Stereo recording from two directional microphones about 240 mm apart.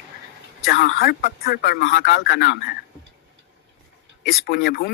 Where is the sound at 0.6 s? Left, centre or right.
Left.